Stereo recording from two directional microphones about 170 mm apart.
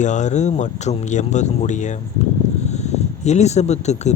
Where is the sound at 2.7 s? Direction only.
40° left (ahead or behind).